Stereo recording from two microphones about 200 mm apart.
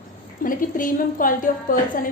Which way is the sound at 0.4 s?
45° left (ahead or behind).